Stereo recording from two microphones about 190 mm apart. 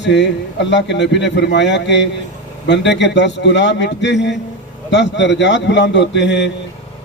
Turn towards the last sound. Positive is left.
turn(degrees=65)  # may be behind; listen again after turning